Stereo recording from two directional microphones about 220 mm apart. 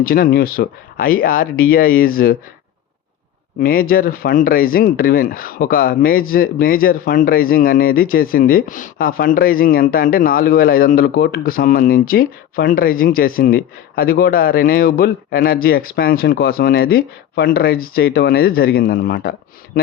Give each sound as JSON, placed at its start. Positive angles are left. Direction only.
{"t": 0.0, "sound": "speech", "side_deg": 40}
{"t": 3.6, "sound": "speech", "side_deg": 40}